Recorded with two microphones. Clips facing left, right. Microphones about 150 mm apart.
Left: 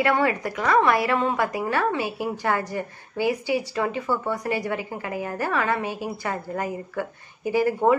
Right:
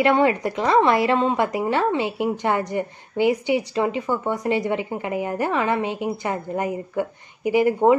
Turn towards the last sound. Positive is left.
turn(degrees=-20)  # may be behind; listen again after turning